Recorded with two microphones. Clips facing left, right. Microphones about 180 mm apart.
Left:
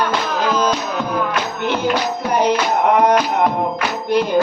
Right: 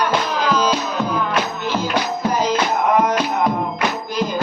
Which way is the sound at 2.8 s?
65° left (ahead or behind).